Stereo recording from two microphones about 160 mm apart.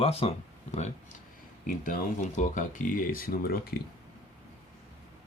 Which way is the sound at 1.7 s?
55° left (ahead or behind).